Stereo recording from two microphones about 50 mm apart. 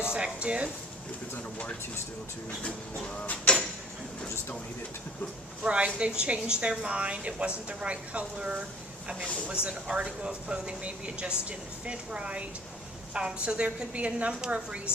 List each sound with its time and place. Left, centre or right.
0.1 s a woman's voice: centre
3.5 s a man's voice: left
5.6 s a woman's voice: right
9.2 s a man's voice: left
9.5 s a woman's voice: right